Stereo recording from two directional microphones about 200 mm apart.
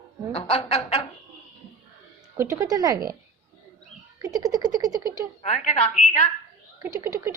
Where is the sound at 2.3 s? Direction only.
15° right (ahead or behind).